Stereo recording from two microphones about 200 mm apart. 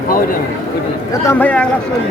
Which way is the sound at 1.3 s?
5° left (ahead or behind).